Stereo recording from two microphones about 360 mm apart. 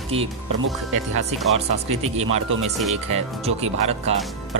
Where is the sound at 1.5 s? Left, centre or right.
Centre.